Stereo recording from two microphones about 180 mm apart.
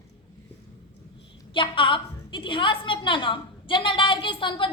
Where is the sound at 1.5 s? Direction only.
25° left (ahead or behind).